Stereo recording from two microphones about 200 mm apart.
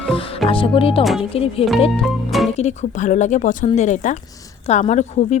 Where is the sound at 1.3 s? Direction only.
30° left (ahead or behind).